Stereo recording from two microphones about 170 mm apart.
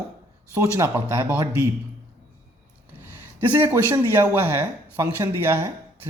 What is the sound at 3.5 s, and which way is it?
Speech, 15° right (ahead or behind).